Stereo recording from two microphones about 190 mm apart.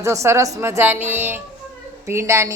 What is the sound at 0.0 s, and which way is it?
Speech, 15° right (ahead or behind).